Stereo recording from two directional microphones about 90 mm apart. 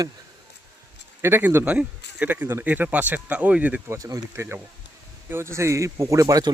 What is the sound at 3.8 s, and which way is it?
Speech, 40° right (ahead or behind).